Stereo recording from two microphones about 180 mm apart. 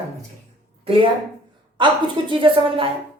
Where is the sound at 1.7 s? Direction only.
25° right (ahead or behind).